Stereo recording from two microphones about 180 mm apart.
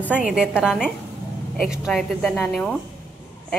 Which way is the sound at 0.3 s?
Centre (ahead or behind).